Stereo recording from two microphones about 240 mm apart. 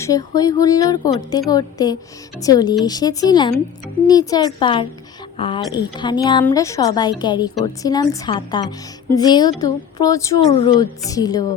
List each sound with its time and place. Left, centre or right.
0.0 s a woman's voice: centre